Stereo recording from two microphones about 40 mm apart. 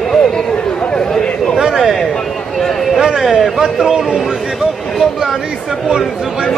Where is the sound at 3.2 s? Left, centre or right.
Centre.